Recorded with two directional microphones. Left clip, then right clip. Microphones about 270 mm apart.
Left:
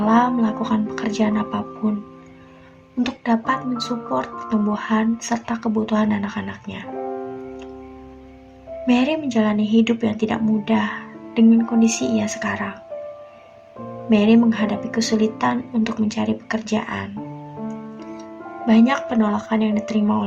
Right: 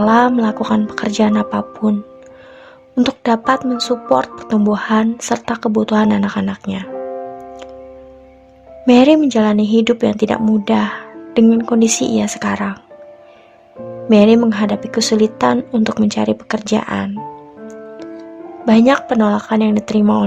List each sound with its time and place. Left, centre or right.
0.0 s speech: right
3.0 s speech: right
8.9 s speech: right
14.1 s speech: right
18.6 s speech: right